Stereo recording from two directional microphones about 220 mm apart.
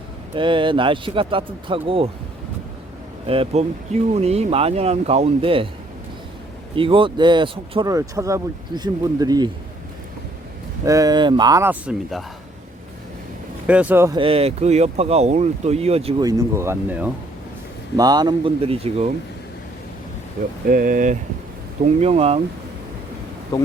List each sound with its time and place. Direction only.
0.3 s speech: 20° right (ahead or behind)
3.2 s speech: 25° right (ahead or behind)
6.7 s speech: 25° right (ahead or behind)
10.8 s speech: 15° right (ahead or behind)
13.7 s speech: 5° right (ahead or behind)
14.2 s speech: 25° right (ahead or behind)
20.7 s speech: 40° right (ahead or behind)